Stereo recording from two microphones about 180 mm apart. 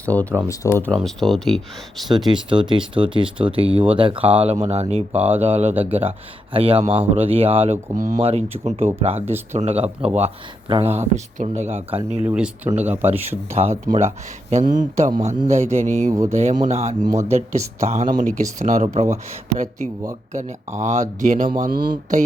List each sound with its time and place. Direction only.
0.0 s speech: 10° left (ahead or behind)
0.9 s speech: centre (ahead or behind)
2.2 s speech: 25° right (ahead or behind)
12.2 s speech: 5° right (ahead or behind)
13.5 s speech: 35° right (ahead or behind)